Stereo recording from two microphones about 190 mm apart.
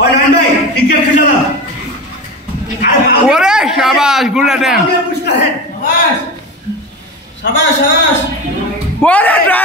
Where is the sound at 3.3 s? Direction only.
5° right (ahead or behind).